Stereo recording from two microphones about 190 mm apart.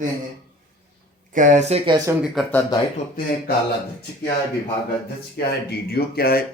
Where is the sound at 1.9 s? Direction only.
15° right (ahead or behind).